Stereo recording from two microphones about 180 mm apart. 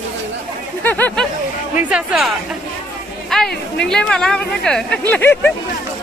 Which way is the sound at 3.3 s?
Centre (ahead or behind).